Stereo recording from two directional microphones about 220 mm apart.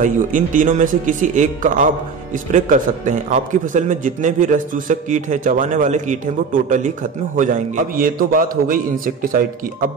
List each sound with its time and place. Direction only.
0.0 s a man's voice: 35° right (ahead or behind)